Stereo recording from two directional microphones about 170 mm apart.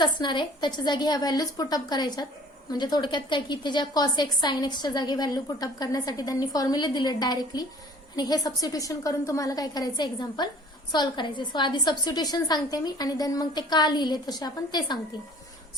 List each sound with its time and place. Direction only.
0.0 s a woman's voice: 25° left (ahead or behind)